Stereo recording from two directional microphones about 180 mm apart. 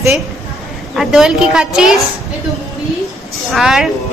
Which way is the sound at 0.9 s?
5° right (ahead or behind).